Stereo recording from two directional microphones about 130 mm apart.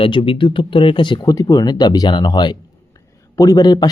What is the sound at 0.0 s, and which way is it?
Speech, 40° left (ahead or behind).